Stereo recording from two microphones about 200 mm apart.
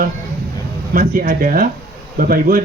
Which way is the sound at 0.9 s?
45° right (ahead or behind).